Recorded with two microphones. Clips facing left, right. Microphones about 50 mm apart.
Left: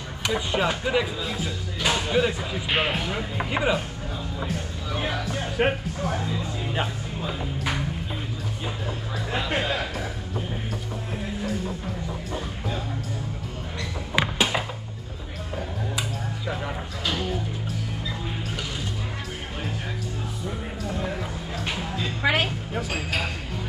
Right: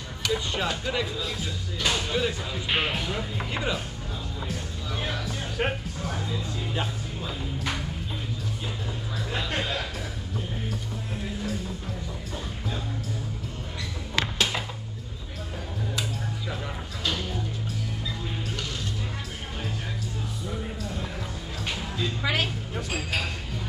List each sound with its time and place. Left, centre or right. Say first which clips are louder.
0.2 s speech: left 3 dB; centre
4.9 s speech: left 4 dB; centre
9.3 s a sound: left 4 dB; centre
14.1 s music: left 3 dB; centre
16.0 s music: left 2 dB; centre
21.6 s music: even; centre
22.2 s speech: left 5 dB; left
22.8 s speech: left 2 dB; centre